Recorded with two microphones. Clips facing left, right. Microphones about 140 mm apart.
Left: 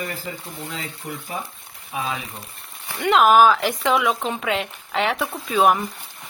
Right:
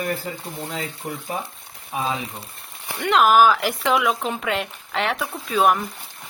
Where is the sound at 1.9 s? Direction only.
35° right (ahead or behind).